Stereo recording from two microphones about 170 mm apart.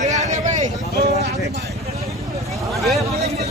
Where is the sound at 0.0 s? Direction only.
45° right (ahead or behind).